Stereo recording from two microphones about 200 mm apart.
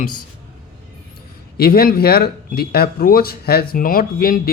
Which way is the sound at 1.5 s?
50° left (ahead or behind).